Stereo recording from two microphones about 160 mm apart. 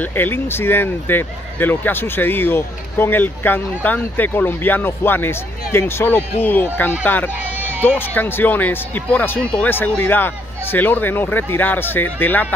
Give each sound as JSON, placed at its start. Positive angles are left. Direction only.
{"t": 0.0, "sound": "speech", "side_deg": 15}
{"t": 7.3, "sound": "a sound", "side_deg": -10}
{"t": 8.1, "sound": "speech", "side_deg": 10}